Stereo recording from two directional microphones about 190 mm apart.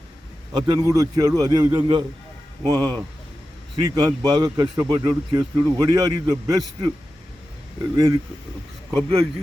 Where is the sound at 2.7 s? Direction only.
10° left (ahead or behind).